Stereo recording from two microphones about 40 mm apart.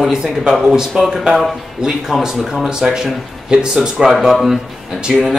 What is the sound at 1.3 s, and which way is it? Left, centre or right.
Speech, centre.